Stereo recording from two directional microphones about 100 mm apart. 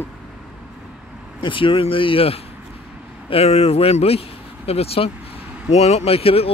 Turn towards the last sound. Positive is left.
turn(degrees=80)